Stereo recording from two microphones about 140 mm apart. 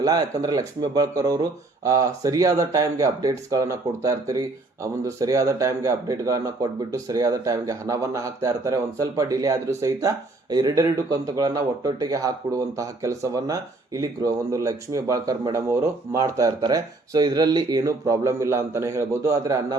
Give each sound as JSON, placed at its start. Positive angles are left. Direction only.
{"t": 0.0, "sound": "speech", "side_deg": -25}